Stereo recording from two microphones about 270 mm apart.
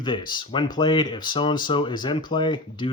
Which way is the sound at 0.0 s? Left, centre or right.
Centre.